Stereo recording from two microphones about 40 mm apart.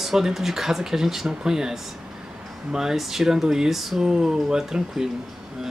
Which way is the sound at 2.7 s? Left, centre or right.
Centre.